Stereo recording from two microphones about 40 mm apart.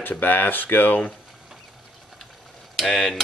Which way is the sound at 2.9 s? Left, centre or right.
Centre.